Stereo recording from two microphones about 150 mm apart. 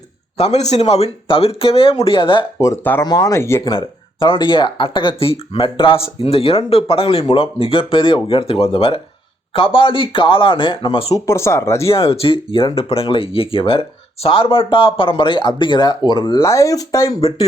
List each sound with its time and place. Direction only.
0.3 s speech: 45° left (ahead or behind)
2.6 s speech: 15° left (ahead or behind)
3.7 s speech: 35° left (ahead or behind)
11.1 s speech: 20° left (ahead or behind)
11.9 s speech: 40° left (ahead or behind); by 17.2 s 20° left (ahead or behind)